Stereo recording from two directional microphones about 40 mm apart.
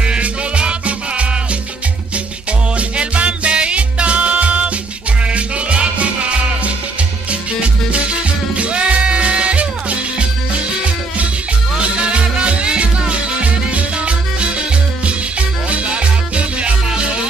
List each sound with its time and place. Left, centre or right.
0.0 s music: right
2.8 s music: right
7.9 s music: right
11.8 s music: right
15.7 s music: right